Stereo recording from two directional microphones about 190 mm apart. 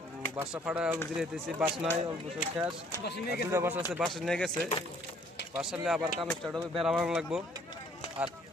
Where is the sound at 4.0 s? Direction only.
Centre (ahead or behind).